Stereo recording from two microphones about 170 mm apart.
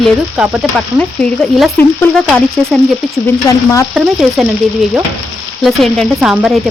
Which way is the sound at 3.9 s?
Centre (ahead or behind).